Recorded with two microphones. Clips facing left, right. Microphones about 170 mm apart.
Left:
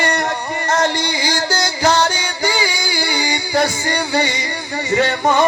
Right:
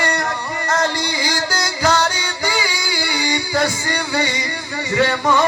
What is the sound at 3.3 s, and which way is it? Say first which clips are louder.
Music: left 1 dB; 25° left (ahead or behind).